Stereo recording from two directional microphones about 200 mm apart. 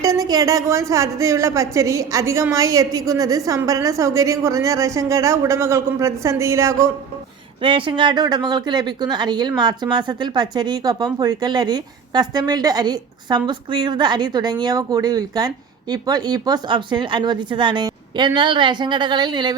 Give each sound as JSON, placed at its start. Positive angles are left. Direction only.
{"t": 0.0, "sound": "a woman's voice", "side_deg": -15}
{"t": 7.6, "sound": "speech", "side_deg": -25}